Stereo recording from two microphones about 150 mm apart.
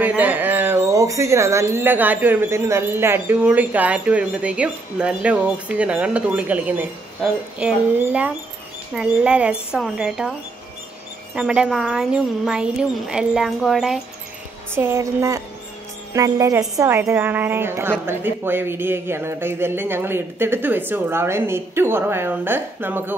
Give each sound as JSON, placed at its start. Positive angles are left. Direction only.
{"t": 0.0, "sound": "a woman's voice", "side_deg": -10}
{"t": 11.3, "sound": "a woman's voice", "side_deg": -5}
{"t": 14.7, "sound": "speech", "side_deg": -15}